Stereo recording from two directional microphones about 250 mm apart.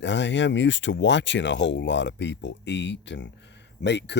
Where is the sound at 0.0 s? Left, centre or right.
Left.